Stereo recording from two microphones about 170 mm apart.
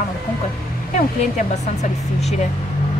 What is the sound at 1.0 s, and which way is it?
Speech, 45° left (ahead or behind).